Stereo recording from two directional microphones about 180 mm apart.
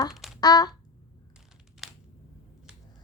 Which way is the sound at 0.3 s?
20° left (ahead or behind).